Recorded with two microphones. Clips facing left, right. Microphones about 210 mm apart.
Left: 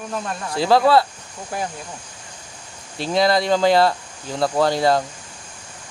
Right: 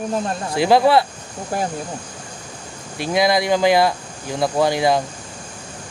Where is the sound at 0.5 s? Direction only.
15° right (ahead or behind).